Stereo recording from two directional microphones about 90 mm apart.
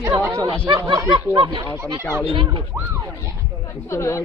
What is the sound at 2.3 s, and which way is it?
Speech, 70° right (ahead or behind).